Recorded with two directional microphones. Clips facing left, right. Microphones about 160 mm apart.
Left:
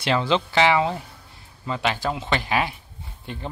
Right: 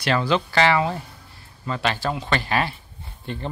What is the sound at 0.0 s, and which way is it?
Speech, 20° left (ahead or behind).